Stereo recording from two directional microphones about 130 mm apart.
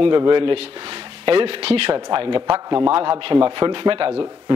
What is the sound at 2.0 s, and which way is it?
A man's voice, 40° right (ahead or behind).